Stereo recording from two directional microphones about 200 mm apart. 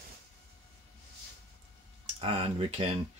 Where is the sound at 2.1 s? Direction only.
30° right (ahead or behind).